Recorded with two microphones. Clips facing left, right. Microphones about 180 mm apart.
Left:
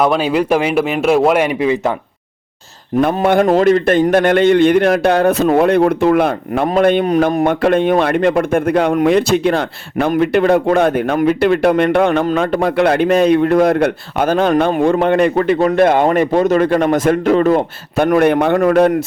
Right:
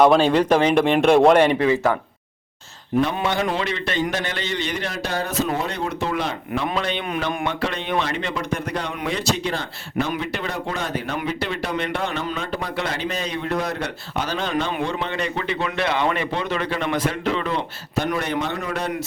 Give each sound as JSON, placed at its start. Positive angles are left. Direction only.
{"t": 0.0, "sound": "speech", "side_deg": 5}
{"t": 3.0, "sound": "a man's voice", "side_deg": 50}